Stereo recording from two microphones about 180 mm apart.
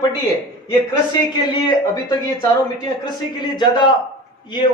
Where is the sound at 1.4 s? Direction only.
25° left (ahead or behind).